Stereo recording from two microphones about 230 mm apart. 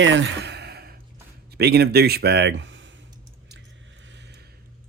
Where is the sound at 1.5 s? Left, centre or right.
Right.